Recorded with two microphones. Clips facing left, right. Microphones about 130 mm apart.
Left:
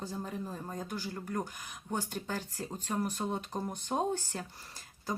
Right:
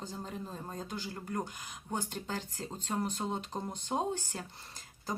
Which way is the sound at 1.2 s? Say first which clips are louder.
Even; 20° right (ahead or behind).